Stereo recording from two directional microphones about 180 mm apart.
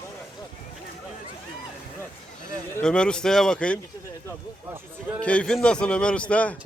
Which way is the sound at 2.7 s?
5° left (ahead or behind).